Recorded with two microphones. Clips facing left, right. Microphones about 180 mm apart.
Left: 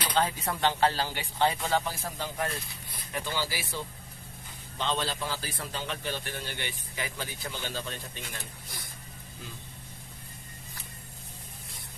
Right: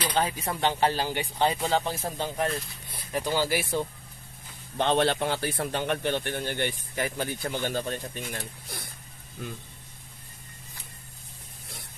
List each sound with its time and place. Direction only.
0.2 s speech: 10° right (ahead or behind)
2.9 s a sound: 35° right (ahead or behind)
3.3 s speech: 45° right (ahead or behind)
4.8 s a man's voice: 60° right (ahead or behind)